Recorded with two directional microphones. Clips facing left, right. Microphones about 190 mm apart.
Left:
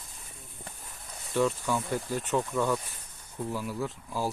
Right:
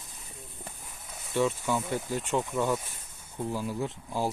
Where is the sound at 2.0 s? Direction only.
15° right (ahead or behind).